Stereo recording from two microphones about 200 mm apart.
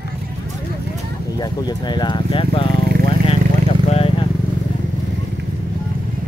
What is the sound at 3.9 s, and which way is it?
Vehicle, 30° left (ahead or behind).